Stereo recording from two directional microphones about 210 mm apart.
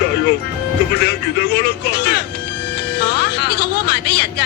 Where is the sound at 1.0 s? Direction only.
50° left (ahead or behind).